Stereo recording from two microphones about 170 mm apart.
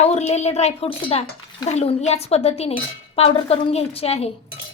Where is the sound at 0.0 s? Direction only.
40° left (ahead or behind).